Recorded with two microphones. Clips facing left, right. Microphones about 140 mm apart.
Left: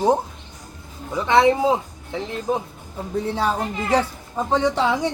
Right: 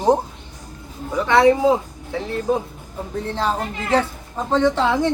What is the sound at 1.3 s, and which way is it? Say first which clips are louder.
A woman's voice: right 2 dB; 20° left (ahead or behind).